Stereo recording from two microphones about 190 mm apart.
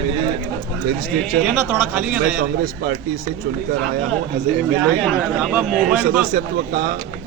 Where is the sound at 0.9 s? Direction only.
50° right (ahead or behind).